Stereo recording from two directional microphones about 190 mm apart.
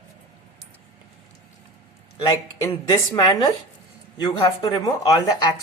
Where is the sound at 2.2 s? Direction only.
20° left (ahead or behind).